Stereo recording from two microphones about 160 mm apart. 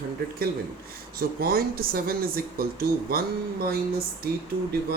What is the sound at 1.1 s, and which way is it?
Speech, 70° right (ahead or behind).